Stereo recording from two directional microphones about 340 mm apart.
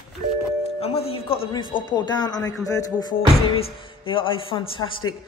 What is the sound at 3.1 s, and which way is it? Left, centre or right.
A man's voice, left.